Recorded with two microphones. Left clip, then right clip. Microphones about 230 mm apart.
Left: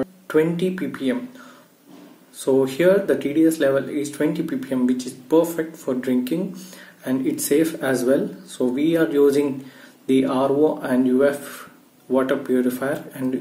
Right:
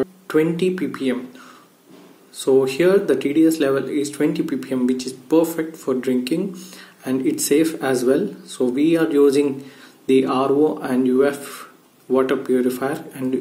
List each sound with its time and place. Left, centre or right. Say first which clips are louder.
0.0 s speech: right 1 dB; centre
2.3 s speech: right 3 dB; centre